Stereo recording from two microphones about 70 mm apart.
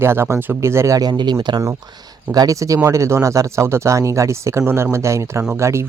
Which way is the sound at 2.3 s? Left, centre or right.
Right.